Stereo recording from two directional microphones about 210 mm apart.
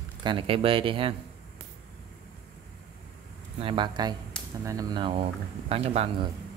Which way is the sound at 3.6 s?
25° right (ahead or behind).